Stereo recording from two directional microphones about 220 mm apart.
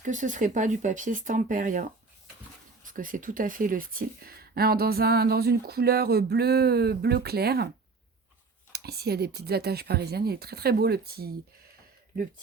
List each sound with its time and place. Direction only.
0.0 s speech: 35° right (ahead or behind)
8.7 s speech: 45° right (ahead or behind)